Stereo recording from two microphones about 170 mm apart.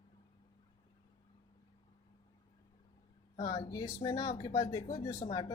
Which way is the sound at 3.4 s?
25° left (ahead or behind).